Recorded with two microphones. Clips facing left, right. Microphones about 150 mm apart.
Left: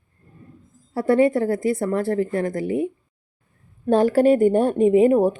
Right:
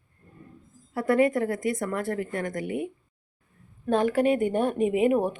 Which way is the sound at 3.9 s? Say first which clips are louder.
Left 6 dB; 35° left (ahead or behind).